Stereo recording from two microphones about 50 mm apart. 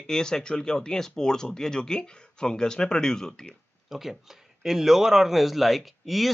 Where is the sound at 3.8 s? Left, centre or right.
Centre.